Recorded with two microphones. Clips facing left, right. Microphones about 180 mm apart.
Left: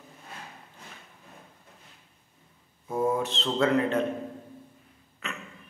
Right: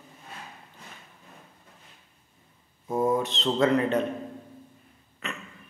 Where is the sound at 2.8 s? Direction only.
20° right (ahead or behind).